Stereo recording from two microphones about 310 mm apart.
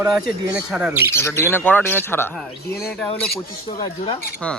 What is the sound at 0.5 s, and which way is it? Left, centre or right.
Speech, centre.